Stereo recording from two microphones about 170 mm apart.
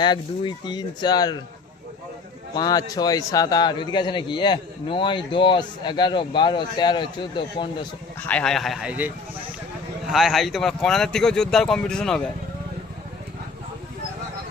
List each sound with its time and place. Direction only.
0.0 s a man's voice: 25° left (ahead or behind)
2.6 s a man's voice: 20° left (ahead or behind)
8.2 s speech: 5° left (ahead or behind)